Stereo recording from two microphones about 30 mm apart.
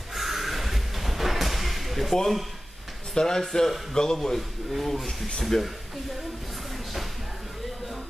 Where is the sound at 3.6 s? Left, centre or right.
Centre.